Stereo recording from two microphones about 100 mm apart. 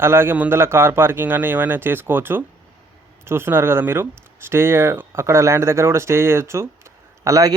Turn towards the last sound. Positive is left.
turn(degrees=-35)  # may be behind; listen again after turning